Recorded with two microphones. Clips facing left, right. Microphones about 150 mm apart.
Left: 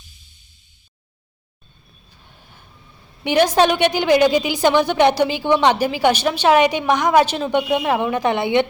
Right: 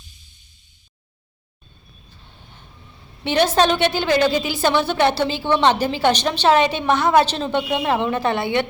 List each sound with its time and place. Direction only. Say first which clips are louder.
2.2 s vehicle: even; 10° left (ahead or behind)
3.2 s a woman's voice: left 2 dB; 15° left (ahead or behind)